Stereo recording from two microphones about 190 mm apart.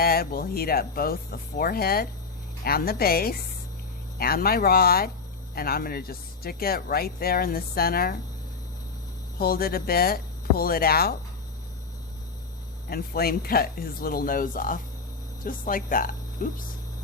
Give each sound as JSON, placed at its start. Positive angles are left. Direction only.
{"t": 0.0, "sound": "speech", "side_deg": 55}
{"t": 9.4, "sound": "speech", "side_deg": 50}
{"t": 12.9, "sound": "speech", "side_deg": 55}